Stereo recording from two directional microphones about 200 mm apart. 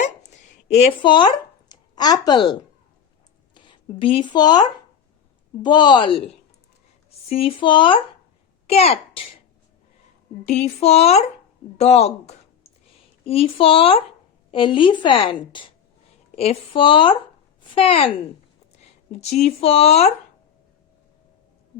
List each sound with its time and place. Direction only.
0.3 s a sound: 35° left (ahead or behind)
1.7 s a woman's voice: 20° left (ahead or behind)
10.4 s a woman's voice: 35° left (ahead or behind)